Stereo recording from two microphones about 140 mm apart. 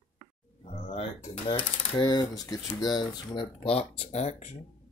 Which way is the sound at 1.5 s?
35° left (ahead or behind).